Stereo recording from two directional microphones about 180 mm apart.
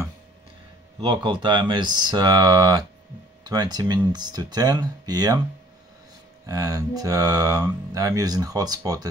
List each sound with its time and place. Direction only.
0.9 s speech: 25° right (ahead or behind)
6.4 s speech: 20° right (ahead or behind)